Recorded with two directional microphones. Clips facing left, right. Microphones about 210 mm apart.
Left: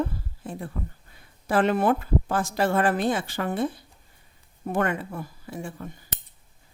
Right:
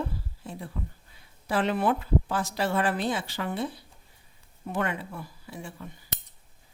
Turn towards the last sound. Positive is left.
turn(degrees=50)  # may be behind; listen again after turning